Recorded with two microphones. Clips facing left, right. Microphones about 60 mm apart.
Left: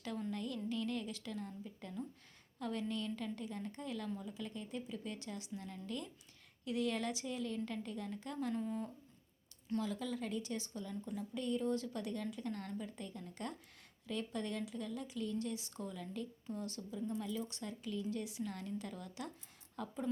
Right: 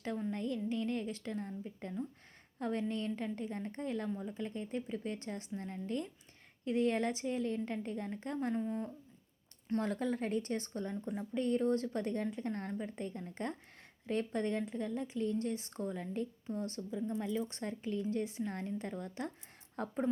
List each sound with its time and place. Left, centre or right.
0.2 s a woman's voice: right
9.6 s a woman's voice: right